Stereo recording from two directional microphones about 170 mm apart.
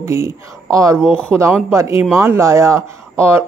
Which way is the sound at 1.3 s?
15° right (ahead or behind).